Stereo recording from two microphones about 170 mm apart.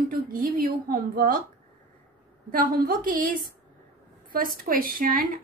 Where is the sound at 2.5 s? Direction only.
55° right (ahead or behind).